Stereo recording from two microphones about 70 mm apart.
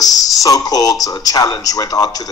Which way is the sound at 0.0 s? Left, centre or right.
Left.